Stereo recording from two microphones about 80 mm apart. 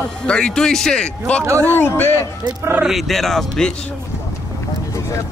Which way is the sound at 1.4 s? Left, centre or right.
Right.